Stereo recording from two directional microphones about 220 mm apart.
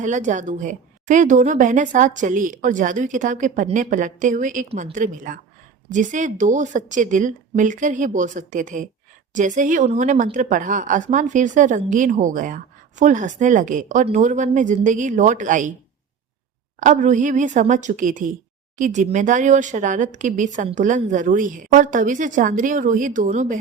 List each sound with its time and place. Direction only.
0.0 s speech: 35° right (ahead or behind)
16.8 s speech: 35° right (ahead or behind)